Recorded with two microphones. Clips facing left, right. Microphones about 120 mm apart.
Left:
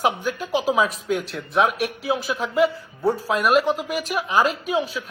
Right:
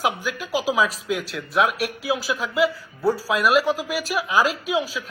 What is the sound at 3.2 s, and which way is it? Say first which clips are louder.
Speech: left 1 dB; 5° right (ahead or behind).